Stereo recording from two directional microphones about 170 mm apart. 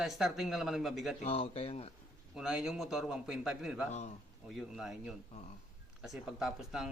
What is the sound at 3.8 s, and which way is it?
Speech, 40° left (ahead or behind).